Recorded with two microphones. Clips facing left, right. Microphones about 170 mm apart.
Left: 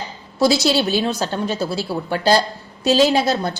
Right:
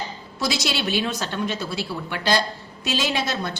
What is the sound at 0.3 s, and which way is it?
Speech, 30° left (ahead or behind).